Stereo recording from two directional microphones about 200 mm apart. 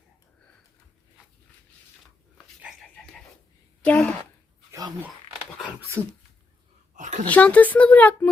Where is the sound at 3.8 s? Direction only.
5° left (ahead or behind).